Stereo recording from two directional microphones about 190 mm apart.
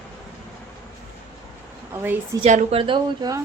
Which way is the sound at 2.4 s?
35° right (ahead or behind).